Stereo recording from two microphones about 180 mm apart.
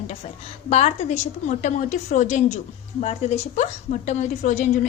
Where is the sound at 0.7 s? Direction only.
35° left (ahead or behind).